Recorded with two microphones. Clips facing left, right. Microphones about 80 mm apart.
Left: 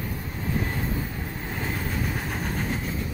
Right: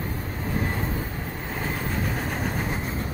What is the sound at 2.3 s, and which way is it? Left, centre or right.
Train, centre.